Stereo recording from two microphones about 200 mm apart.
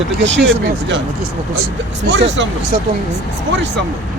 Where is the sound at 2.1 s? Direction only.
60° right (ahead or behind).